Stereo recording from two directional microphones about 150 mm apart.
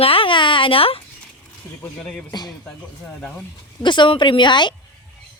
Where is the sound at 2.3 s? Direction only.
25° left (ahead or behind).